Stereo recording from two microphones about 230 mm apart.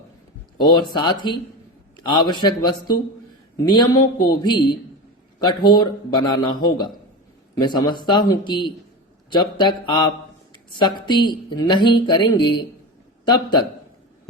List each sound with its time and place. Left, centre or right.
0.6 s speech: centre